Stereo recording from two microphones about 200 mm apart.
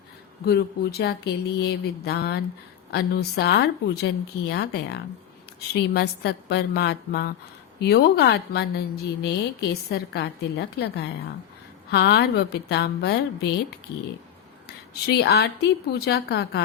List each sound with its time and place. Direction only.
0.4 s a woman's voice: 55° left (ahead or behind)